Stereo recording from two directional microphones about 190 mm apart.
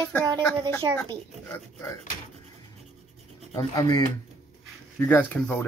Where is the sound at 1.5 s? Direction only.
15° left (ahead or behind).